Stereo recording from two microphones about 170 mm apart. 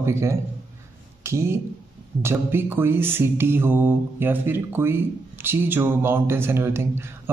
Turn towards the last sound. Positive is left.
turn(degrees=-15)  # may be behind; listen again after turning